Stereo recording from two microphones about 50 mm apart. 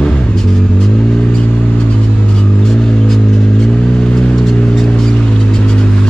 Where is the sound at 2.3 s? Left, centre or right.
Centre.